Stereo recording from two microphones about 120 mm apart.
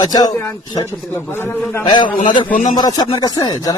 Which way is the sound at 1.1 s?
20° left (ahead or behind).